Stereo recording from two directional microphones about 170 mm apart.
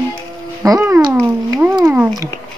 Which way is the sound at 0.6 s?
15° right (ahead or behind).